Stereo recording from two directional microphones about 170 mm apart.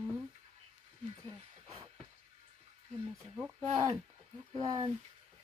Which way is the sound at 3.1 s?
15° right (ahead or behind).